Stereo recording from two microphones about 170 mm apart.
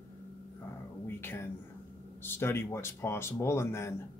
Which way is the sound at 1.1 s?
15° left (ahead or behind).